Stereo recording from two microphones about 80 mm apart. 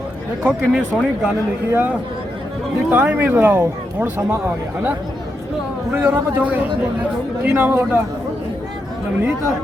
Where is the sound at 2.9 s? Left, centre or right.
Right.